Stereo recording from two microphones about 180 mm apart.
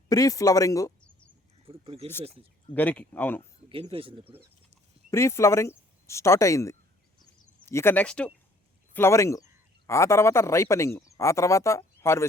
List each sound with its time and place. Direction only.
0.1 s speech: 20° left (ahead or behind)
1.6 s a sound: 30° right (ahead or behind)
2.7 s speech: 10° left (ahead or behind)
3.9 s speech: 30° right (ahead or behind)
5.1 s speech: 15° left (ahead or behind)